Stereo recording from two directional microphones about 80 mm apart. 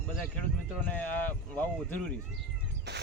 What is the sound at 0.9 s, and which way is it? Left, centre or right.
Speech, left.